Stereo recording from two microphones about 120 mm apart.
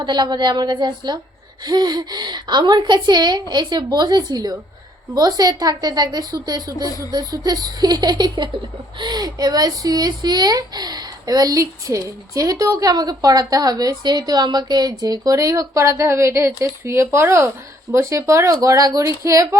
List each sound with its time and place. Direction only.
0.0 s speech: 40° right (ahead or behind)